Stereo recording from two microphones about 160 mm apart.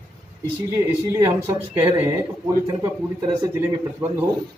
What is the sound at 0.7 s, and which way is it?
A man's voice, 15° right (ahead or behind).